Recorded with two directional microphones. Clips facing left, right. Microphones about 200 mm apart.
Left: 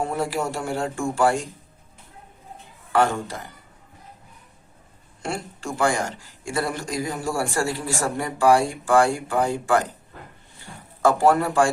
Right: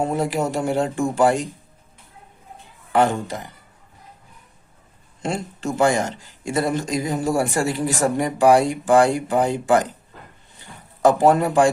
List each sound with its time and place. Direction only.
0.0 s speech: 20° right (ahead or behind)
2.9 s speech: 20° right (ahead or behind)
5.2 s speech: 20° right (ahead or behind)
11.0 s speech: 20° right (ahead or behind)